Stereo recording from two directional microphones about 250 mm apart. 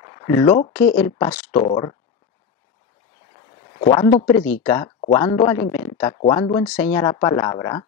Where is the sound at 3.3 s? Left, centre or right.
Centre.